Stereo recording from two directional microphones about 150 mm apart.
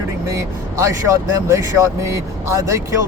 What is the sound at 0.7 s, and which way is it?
Speech, 20° right (ahead or behind).